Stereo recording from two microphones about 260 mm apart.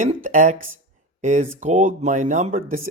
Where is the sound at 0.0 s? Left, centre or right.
Right.